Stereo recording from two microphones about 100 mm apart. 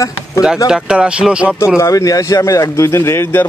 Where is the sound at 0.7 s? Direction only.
10° right (ahead or behind).